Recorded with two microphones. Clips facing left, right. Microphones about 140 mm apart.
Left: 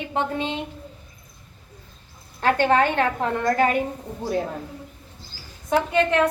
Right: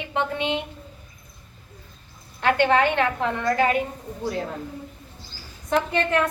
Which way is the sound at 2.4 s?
40° left (ahead or behind).